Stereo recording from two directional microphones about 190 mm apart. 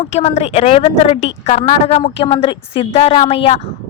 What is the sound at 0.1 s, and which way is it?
A woman's voice, 35° left (ahead or behind).